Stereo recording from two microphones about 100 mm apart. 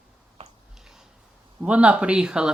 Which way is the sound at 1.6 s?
10° right (ahead or behind).